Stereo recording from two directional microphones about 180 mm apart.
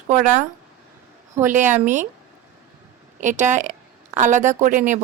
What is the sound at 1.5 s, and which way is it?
Speech, 45° right (ahead or behind).